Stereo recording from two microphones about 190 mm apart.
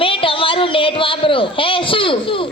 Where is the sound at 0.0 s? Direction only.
30° left (ahead or behind).